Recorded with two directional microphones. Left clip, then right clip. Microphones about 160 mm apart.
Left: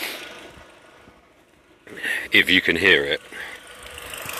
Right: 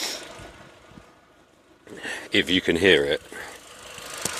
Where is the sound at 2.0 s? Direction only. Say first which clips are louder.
Left 6 dB; 15° right (ahead or behind).